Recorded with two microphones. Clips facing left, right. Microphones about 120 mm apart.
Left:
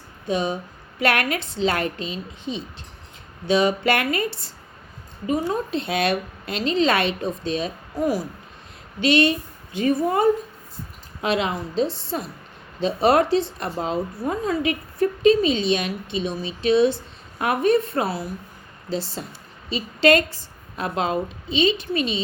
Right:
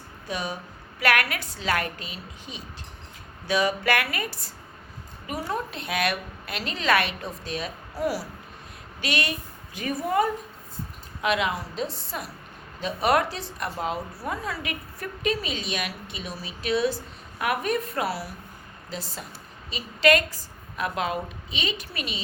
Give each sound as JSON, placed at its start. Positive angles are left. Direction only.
{"t": 0.3, "sound": "a woman's voice", "side_deg": 25}